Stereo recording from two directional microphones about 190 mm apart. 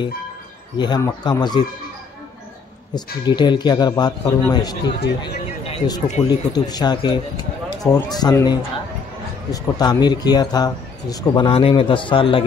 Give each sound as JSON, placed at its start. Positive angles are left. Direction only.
{"t": 0.7, "sound": "speech", "side_deg": 20}
{"t": 2.9, "sound": "speech", "side_deg": 25}